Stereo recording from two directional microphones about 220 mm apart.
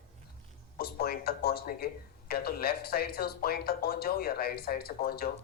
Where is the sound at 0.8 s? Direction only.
45° left (ahead or behind).